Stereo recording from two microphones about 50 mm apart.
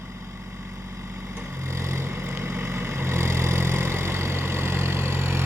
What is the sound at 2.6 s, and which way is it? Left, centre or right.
Vehicle, right.